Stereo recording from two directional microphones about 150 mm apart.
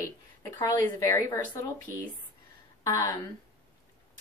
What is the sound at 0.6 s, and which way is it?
Speech, 20° left (ahead or behind).